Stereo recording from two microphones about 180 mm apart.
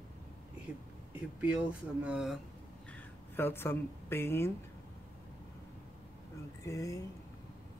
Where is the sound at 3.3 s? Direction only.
10° left (ahead or behind).